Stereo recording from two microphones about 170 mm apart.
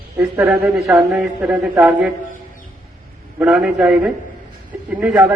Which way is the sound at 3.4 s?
5° right (ahead or behind).